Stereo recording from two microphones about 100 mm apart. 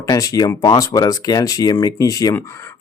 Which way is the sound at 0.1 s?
35° left (ahead or behind).